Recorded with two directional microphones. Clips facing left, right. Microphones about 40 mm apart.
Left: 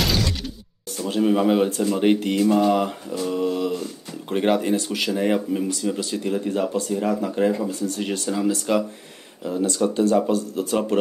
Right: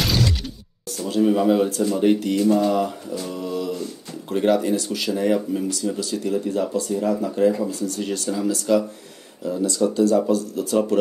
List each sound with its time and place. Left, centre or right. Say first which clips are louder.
0.8 s speech: right 1 dB; left